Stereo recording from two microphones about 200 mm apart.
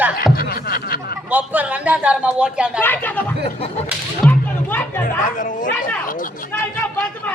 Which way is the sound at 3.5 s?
30° left (ahead or behind).